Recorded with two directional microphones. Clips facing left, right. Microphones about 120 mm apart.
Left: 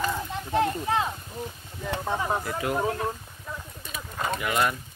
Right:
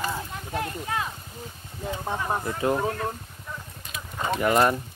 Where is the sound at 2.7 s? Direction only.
20° left (ahead or behind).